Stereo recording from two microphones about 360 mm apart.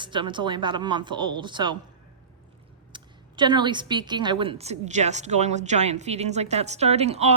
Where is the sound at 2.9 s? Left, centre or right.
Centre.